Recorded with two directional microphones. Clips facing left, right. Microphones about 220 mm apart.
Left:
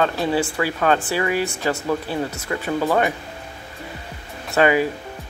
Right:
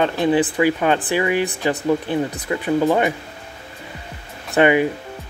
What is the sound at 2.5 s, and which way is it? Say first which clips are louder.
Speech: right 4 dB; 15° right (ahead or behind).